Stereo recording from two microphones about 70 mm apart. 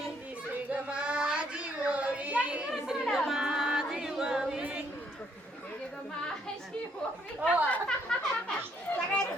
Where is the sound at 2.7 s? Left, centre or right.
Centre.